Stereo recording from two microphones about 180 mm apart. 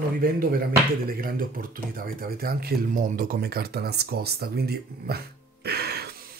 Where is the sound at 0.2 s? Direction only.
55° right (ahead or behind).